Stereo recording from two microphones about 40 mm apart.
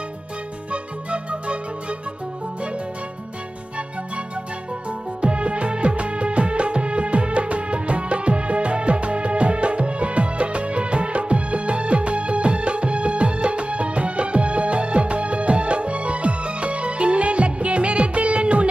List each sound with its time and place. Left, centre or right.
0.7 s music: right
4.9 s music: right